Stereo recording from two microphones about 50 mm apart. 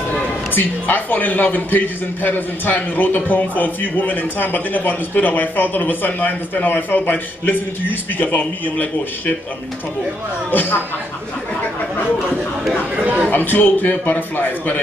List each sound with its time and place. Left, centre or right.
0.6 s a man's voice: left
10.5 s a man's voice: left
12.9 s a sound: right
13.3 s a man's voice: left